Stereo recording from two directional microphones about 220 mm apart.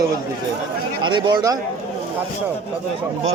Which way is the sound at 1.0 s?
20° right (ahead or behind).